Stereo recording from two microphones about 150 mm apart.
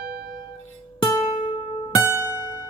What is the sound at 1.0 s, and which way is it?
Music, 25° left (ahead or behind).